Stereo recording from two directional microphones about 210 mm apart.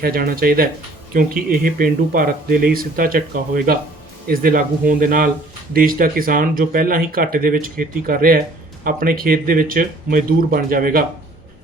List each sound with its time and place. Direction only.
0.0 s speech: 45° right (ahead or behind)